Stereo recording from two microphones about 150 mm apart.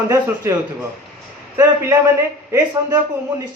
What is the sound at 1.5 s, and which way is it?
Speech, 20° right (ahead or behind).